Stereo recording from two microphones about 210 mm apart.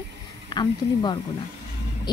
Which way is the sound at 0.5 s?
20° left (ahead or behind).